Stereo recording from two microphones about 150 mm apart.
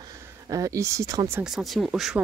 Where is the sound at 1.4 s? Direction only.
Centre (ahead or behind).